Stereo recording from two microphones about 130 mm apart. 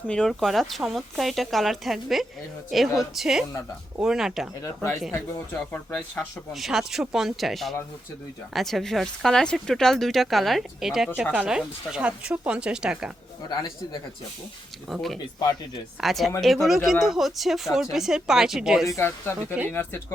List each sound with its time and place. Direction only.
0.1 s speech: 5° left (ahead or behind)
4.6 s speech: 25° left (ahead or behind)
5.5 s speech: 10° left (ahead or behind)
6.5 s speech: centre (ahead or behind)
14.8 s speech: centre (ahead or behind)
18.9 s speech: 20° left (ahead or behind)